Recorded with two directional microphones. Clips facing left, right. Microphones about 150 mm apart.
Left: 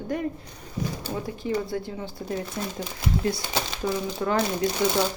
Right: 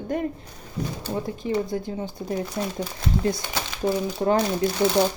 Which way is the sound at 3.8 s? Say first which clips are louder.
Right 6 dB; 35° right (ahead or behind).